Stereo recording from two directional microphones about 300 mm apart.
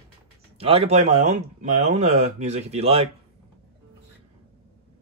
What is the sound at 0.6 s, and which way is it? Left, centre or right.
Speech, centre.